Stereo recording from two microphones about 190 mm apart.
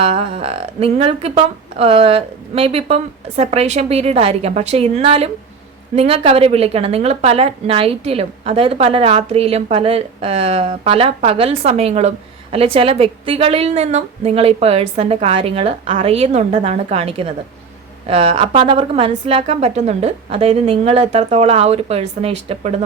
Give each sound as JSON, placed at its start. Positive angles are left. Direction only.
{"t": 0.0, "sound": "a woman's voice", "side_deg": -35}